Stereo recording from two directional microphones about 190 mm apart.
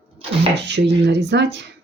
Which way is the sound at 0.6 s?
65° right (ahead or behind).